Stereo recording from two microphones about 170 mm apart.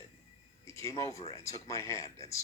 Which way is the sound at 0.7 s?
20° left (ahead or behind).